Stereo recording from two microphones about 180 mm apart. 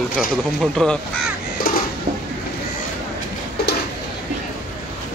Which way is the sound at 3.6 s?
60° left (ahead or behind).